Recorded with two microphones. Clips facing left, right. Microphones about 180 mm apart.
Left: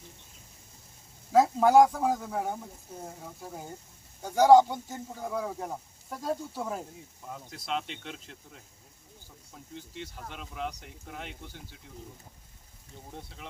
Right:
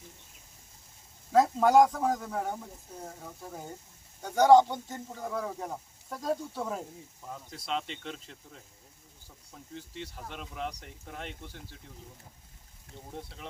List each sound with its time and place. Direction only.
1.3 s speech: 5° left (ahead or behind)
9.7 s speech: centre (ahead or behind)
13.1 s speech: centre (ahead or behind)